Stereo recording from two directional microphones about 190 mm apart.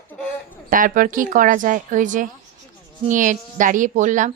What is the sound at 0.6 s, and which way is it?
A woman's voice, 45° right (ahead or behind).